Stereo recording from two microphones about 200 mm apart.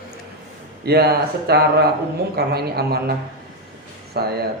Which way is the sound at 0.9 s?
55° right (ahead or behind).